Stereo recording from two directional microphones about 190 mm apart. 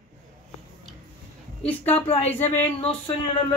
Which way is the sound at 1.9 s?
30° left (ahead or behind).